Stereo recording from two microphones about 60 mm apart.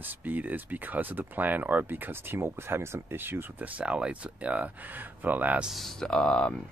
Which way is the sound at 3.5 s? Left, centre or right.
Right.